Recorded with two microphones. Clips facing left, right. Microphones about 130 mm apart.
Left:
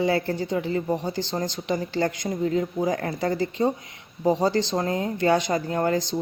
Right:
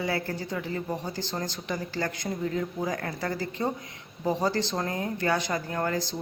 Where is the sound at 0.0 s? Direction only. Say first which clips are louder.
Left 7 dB; 25° left (ahead or behind).